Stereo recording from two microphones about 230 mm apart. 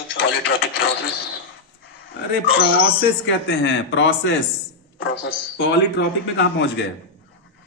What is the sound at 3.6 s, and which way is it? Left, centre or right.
Speech, left.